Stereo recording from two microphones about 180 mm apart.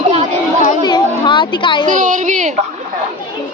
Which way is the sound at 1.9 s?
45° right (ahead or behind).